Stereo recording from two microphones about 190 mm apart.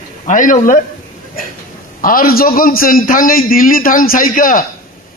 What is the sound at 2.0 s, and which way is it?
A man's voice, 50° left (ahead or behind).